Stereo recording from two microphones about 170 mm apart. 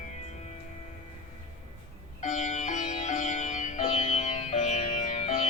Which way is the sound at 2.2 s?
45° left (ahead or behind).